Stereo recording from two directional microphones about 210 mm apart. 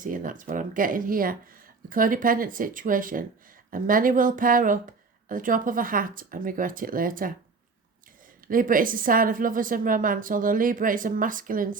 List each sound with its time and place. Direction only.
0.0 s a woman's voice: 40° right (ahead or behind)
8.4 s a woman's voice: 40° right (ahead or behind)